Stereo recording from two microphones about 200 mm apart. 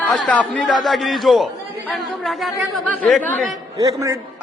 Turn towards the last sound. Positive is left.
turn(degrees=-15)  # may be behind; listen again after turning